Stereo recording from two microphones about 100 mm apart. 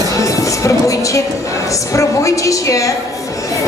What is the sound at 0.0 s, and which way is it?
A woman's voice, 35° left (ahead or behind).